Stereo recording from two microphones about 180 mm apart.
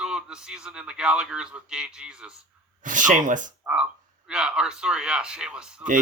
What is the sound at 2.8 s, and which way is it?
Speech, 45° right (ahead or behind).